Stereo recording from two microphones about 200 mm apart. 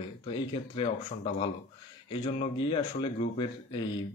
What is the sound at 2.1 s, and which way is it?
Speech, 25° left (ahead or behind).